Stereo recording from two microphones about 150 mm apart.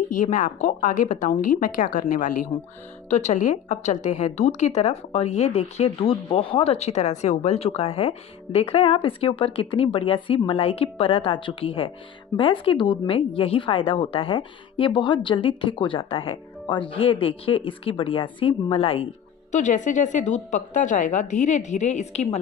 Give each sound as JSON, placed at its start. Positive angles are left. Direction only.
{"t": 0.2, "sound": "a woman's voice", "side_deg": 60}
{"t": 3.1, "sound": "a woman's voice", "side_deg": 50}
{"t": 19.5, "sound": "a woman's voice", "side_deg": 55}